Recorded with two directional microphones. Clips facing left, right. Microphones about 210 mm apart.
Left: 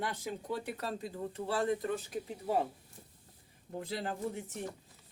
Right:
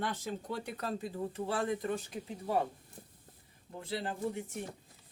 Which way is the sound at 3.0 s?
50° right (ahead or behind).